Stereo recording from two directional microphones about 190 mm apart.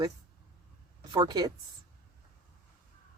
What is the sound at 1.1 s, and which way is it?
Speech, 20° right (ahead or behind).